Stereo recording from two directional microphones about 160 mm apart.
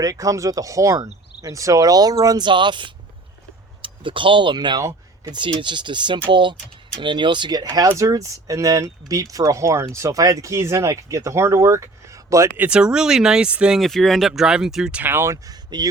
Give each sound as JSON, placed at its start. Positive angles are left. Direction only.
{"t": 0.0, "sound": "speech", "side_deg": -20}
{"t": 12.6, "sound": "speech", "side_deg": -5}